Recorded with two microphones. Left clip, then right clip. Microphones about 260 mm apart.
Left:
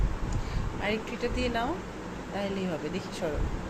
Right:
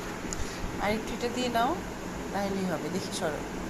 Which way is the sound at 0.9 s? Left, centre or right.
Centre.